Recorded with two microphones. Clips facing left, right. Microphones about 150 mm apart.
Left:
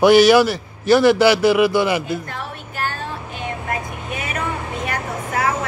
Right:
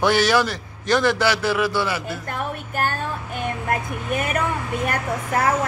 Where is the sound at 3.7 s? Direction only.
50° right (ahead or behind).